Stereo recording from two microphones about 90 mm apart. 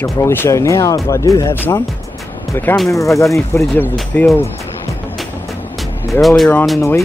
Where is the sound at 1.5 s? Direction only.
20° left (ahead or behind).